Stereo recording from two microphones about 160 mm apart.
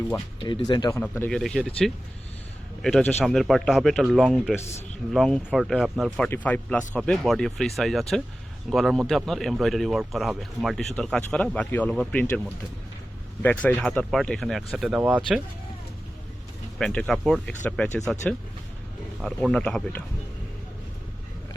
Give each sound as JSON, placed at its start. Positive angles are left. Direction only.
{"t": 0.5, "sound": "speech", "side_deg": 30}
{"t": 0.9, "sound": "speech", "side_deg": 15}
{"t": 3.2, "sound": "speech", "side_deg": 0}
{"t": 13.4, "sound": "speech", "side_deg": 10}
{"t": 16.7, "sound": "speech", "side_deg": 5}
{"t": 19.2, "sound": "speech", "side_deg": 5}